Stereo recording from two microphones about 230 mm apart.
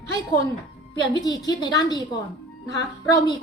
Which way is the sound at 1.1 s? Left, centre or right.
Centre.